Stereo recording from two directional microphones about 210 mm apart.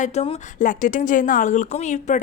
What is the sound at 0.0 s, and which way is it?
Speech, 30° left (ahead or behind).